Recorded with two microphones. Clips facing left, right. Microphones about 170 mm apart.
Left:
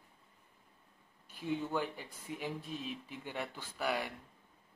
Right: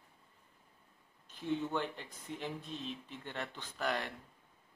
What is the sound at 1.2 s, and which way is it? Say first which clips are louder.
Speech: right 1 dB; 10° left (ahead or behind).